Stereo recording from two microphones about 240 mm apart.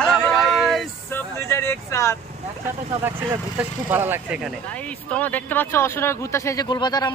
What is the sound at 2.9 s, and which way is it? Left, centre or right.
Speech, centre.